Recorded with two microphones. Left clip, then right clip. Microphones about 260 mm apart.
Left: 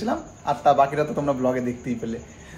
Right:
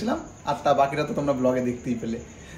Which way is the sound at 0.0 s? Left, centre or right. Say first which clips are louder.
Left 2 dB; centre.